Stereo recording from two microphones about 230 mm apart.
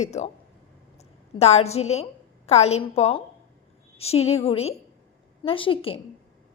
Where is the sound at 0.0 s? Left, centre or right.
Left.